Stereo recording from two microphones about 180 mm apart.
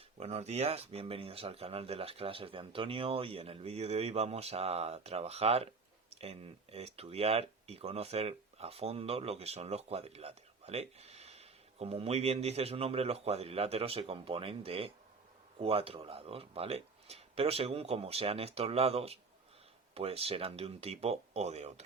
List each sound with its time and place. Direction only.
0.2 s speech: 35° right (ahead or behind)